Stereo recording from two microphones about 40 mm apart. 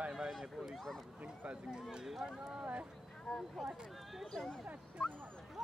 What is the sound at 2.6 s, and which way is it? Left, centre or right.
Speech, right.